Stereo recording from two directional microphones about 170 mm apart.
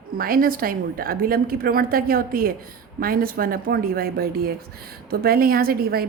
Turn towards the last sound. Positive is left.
turn(degrees=-65)  # may be behind; listen again after turning